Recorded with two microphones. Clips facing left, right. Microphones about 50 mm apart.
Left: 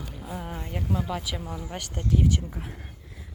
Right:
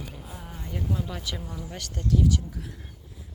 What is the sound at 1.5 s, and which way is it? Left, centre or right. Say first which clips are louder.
Speech: left 2 dB; left.